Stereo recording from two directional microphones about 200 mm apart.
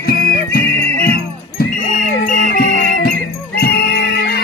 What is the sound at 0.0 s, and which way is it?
Music, 50° left (ahead or behind).